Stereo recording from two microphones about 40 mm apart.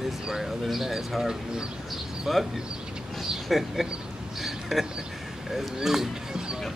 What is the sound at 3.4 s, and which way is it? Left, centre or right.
Speech, centre.